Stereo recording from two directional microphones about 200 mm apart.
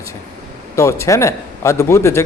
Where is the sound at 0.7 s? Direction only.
15° left (ahead or behind).